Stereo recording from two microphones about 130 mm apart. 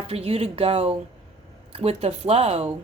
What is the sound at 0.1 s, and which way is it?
A woman's voice, 50° right (ahead or behind).